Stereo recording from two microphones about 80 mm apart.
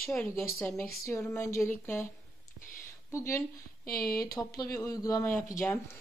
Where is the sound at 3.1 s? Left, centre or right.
Left.